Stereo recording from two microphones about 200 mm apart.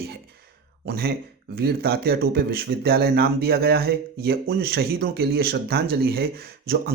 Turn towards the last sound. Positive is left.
turn(degrees=-50)  # may be behind; listen again after turning